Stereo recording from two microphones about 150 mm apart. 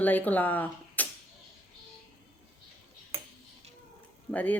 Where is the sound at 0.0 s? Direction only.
10° left (ahead or behind).